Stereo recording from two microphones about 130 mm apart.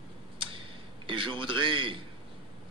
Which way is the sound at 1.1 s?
40° right (ahead or behind).